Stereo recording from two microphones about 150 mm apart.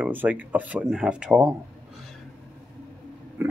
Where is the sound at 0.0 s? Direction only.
10° right (ahead or behind).